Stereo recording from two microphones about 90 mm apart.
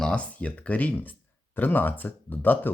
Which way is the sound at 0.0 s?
10° left (ahead or behind).